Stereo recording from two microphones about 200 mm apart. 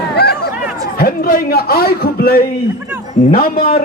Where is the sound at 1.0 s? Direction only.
45° left (ahead or behind).